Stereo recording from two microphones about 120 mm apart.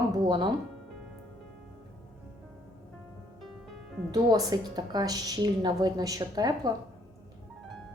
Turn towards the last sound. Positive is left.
turn(degrees=-35)  # may be behind; listen again after turning